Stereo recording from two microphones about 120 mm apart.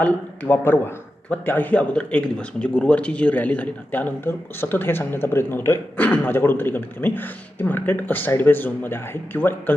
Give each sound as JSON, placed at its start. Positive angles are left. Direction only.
{"t": 0.0, "sound": "a man's voice", "side_deg": 15}